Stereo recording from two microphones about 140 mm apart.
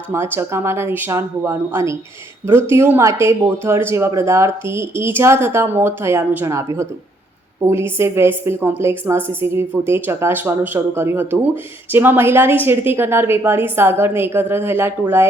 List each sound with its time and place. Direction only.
0.1 s speech: 20° right (ahead or behind)